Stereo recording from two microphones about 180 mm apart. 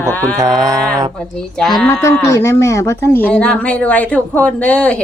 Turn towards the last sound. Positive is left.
turn(degrees=5)  # may be behind; listen again after turning